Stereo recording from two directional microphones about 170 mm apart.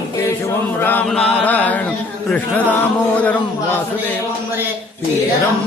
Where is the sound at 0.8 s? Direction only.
10° left (ahead or behind).